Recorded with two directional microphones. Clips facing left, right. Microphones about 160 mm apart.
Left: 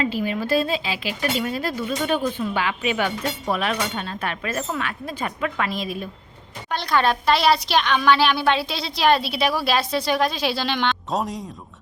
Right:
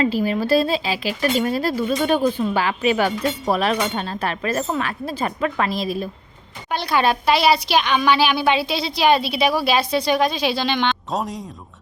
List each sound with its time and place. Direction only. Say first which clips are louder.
0.0 s speech: right 4 dB; 40° right (ahead or behind)
6.7 s a woman's voice: right 1 dB; 5° right (ahead or behind)